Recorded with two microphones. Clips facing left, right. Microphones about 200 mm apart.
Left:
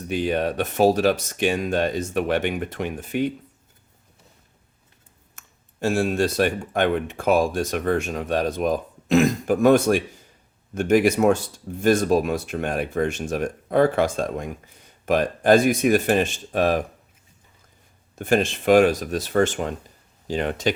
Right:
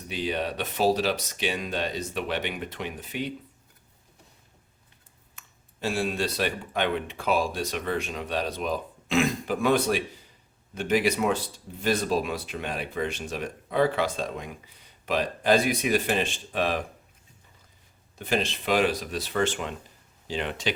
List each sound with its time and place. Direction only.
0.1 s speech: 50° left (ahead or behind)
5.3 s speech: 45° left (ahead or behind)
18.2 s speech: 50° left (ahead or behind)